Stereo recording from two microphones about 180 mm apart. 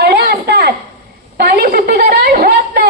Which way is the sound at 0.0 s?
65° right (ahead or behind).